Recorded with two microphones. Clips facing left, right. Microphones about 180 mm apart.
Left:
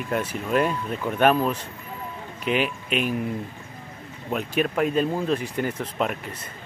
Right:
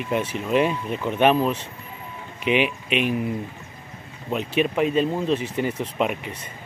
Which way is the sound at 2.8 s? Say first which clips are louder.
Right 2 dB; 45° left (ahead or behind).